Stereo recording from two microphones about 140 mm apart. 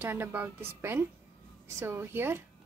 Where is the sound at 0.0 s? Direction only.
15° right (ahead or behind).